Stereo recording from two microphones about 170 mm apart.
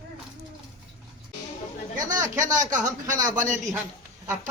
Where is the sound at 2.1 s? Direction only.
50° right (ahead or behind).